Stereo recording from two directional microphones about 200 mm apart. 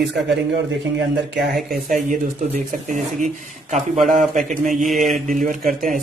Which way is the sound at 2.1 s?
40° right (ahead or behind).